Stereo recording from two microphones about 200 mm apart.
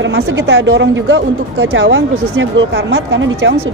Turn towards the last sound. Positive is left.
turn(degrees=-65)  # may be behind; listen again after turning